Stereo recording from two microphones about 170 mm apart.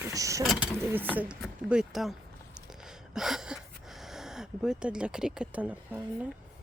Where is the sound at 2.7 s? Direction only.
5° right (ahead or behind).